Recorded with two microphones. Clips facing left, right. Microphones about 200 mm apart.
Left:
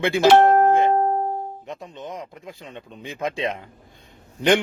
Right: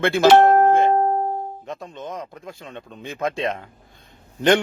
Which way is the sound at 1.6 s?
15° left (ahead or behind).